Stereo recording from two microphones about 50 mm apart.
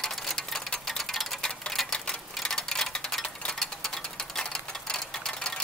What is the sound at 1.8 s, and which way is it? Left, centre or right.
Typewriter, centre.